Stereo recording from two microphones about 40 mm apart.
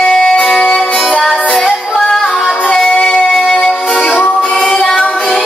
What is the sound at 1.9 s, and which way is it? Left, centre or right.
Music, centre.